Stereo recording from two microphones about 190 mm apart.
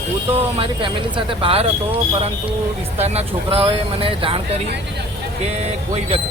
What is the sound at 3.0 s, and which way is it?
Speech, 35° right (ahead or behind).